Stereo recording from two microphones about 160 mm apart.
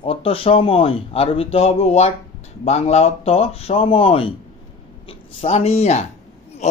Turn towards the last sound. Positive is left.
turn(degrees=45)  # may be behind; listen again after turning